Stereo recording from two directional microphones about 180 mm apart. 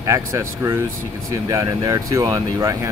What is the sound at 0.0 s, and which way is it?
Speech, 15° right (ahead or behind).